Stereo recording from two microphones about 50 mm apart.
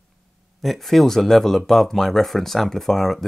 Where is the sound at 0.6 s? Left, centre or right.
Centre.